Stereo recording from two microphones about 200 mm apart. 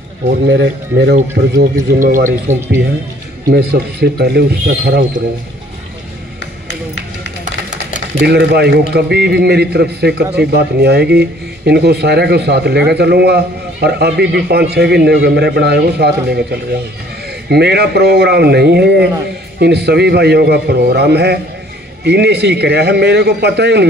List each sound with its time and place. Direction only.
0.3 s a man's voice: 60° right (ahead or behind)
2.0 s a man's voice: 40° right (ahead or behind)
3.4 s speech: 55° right (ahead or behind)
8.2 s a man's voice: 55° right (ahead or behind)
17.5 s a man's voice: 55° right (ahead or behind)